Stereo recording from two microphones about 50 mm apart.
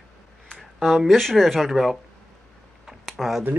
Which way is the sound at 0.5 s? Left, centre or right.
Centre.